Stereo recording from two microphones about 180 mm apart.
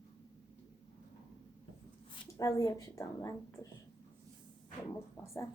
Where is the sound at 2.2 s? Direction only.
20° left (ahead or behind).